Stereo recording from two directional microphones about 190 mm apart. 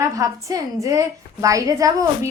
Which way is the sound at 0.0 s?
15° right (ahead or behind).